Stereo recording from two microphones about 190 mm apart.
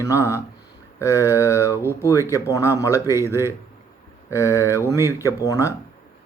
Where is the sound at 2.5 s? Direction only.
15° left (ahead or behind).